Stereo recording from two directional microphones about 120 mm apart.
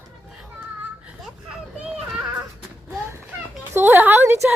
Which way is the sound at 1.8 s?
5° right (ahead or behind).